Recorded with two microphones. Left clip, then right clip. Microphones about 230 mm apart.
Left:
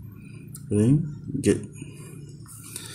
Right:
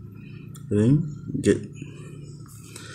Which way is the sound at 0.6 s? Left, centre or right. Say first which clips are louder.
Right 1 dB; centre.